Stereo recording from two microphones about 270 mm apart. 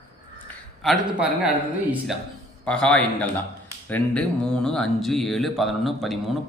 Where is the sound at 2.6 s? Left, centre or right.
Centre.